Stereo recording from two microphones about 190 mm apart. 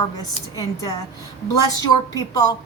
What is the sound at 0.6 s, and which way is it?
Speech, 20° left (ahead or behind).